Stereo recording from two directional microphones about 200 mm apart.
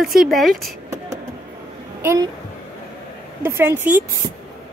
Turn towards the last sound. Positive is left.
turn(degrees=-10)  # may be behind; listen again after turning